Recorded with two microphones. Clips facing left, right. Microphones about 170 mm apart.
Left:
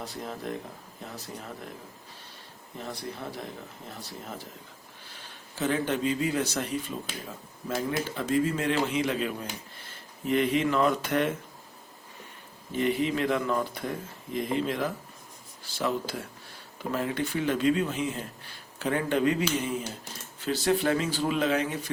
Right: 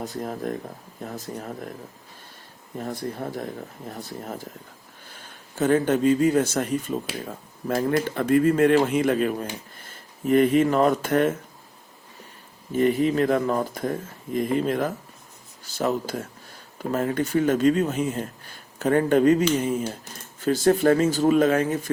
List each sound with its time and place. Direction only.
0.0 s speech: 45° right (ahead or behind)
2.7 s speech: 50° right (ahead or behind)
12.7 s speech: 45° right (ahead or behind)